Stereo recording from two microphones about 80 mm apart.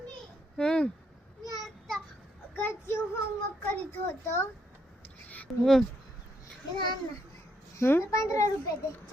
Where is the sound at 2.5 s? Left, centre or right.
Left.